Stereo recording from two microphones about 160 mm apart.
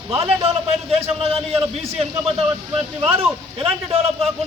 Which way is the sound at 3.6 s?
35° right (ahead or behind).